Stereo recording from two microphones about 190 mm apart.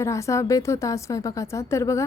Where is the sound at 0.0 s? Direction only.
15° left (ahead or behind).